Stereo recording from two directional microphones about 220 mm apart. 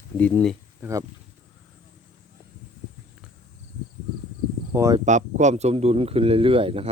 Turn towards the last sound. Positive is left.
turn(degrees=-25)  # may be behind; listen again after turning